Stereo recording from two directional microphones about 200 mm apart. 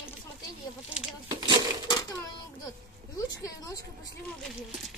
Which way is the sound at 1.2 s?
20° right (ahead or behind).